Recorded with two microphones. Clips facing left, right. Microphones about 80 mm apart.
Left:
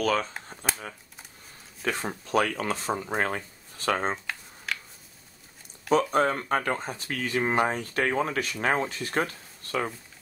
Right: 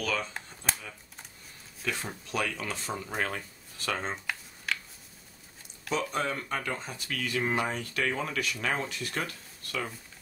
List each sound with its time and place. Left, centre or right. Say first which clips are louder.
0.0 s speech: left 6 dB; left
1.8 s speech: left 5 dB; left
4.7 s a sound: even; centre
5.9 s speech: left 8 dB; left